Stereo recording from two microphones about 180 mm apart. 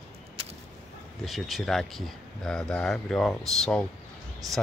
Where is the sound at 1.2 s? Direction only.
Centre (ahead or behind).